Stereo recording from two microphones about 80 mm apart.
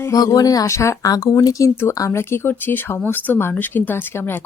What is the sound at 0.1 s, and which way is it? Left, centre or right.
Speech, left.